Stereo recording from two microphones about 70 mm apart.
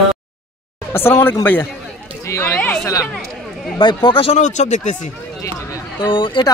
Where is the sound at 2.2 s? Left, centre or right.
Left.